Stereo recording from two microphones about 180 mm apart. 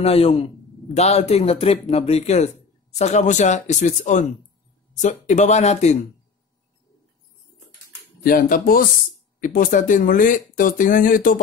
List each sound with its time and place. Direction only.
0.0 s speech: 35° left (ahead or behind)
8.2 s speech: 55° left (ahead or behind)